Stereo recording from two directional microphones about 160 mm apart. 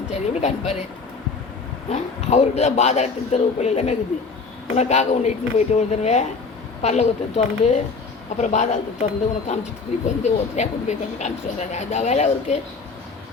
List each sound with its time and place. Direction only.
0.1 s speech: 45° left (ahead or behind)
1.9 s speech: 45° left (ahead or behind)
10.2 s speech: 45° left (ahead or behind)